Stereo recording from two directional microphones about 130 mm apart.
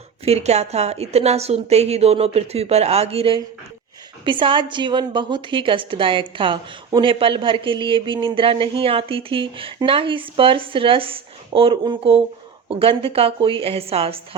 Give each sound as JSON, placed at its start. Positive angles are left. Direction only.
{"t": 0.3, "sound": "a woman's voice", "side_deg": -55}